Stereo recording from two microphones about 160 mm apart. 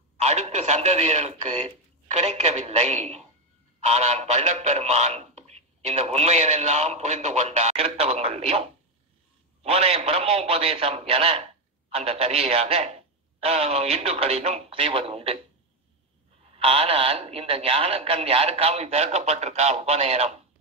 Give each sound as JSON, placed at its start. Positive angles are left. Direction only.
{"t": 0.2, "sound": "a man's voice", "side_deg": -45}
{"t": 16.5, "sound": "a man's voice", "side_deg": -35}